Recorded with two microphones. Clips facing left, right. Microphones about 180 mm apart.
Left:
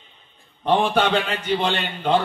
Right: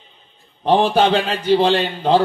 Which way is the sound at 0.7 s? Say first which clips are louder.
Right 4 dB; 35° right (ahead or behind).